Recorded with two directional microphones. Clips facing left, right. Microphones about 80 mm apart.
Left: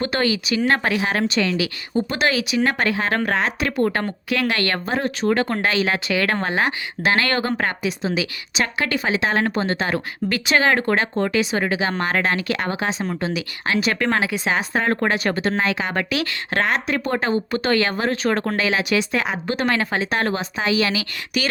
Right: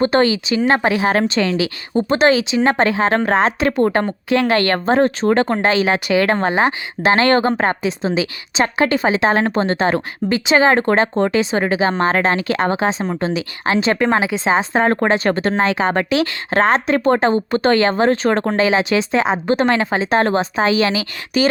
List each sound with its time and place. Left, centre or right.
0.0 s speech: right
0.9 s speech: right